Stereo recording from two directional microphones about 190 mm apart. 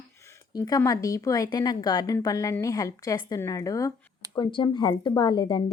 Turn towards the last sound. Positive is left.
turn(degrees=20)  # may be behind; listen again after turning